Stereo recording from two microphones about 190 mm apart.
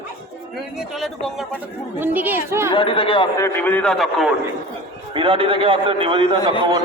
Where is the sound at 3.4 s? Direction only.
10° left (ahead or behind).